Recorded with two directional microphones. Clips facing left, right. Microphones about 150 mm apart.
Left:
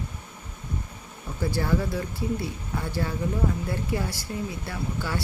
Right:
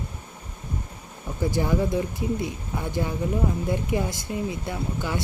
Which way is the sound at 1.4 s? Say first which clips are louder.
Right 2 dB; 15° right (ahead or behind).